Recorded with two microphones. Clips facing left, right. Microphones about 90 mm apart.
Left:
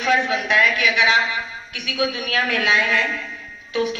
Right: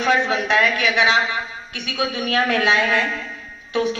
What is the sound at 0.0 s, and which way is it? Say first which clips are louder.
A man's voice: right 1 dB; 30° right (ahead or behind).